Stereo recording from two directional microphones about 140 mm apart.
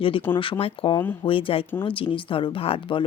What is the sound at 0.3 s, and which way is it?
Speech, 15° left (ahead or behind).